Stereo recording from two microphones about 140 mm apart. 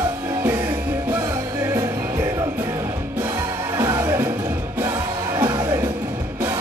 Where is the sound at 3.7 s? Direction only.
20° right (ahead or behind).